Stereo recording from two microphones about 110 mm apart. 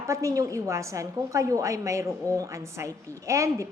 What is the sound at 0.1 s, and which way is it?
A woman's voice, 30° right (ahead or behind).